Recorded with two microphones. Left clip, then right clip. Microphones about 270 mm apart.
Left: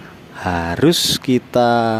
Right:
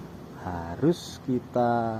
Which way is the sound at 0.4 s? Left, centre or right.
Left.